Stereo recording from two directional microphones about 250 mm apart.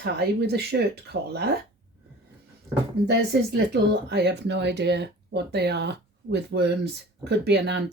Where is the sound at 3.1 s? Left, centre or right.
Right.